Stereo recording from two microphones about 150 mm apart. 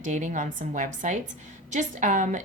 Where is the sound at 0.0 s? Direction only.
55° right (ahead or behind).